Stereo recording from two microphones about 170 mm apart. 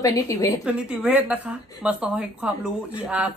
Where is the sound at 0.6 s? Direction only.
5° right (ahead or behind).